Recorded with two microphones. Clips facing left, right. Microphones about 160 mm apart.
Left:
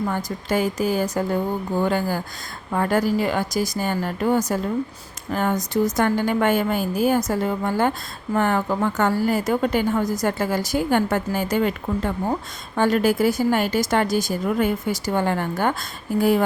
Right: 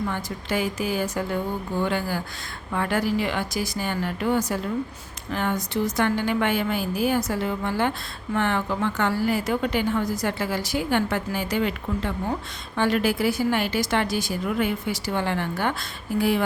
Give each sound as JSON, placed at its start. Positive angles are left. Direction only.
{"t": 0.1, "sound": "a woman's voice", "side_deg": 40}